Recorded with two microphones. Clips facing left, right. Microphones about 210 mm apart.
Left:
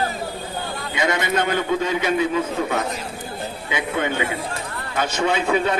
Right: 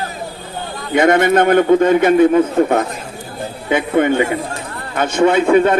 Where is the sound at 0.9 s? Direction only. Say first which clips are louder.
Right 11 dB; 55° right (ahead or behind).